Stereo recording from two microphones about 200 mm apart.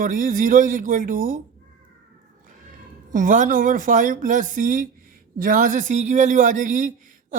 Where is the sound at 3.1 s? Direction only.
40° right (ahead or behind).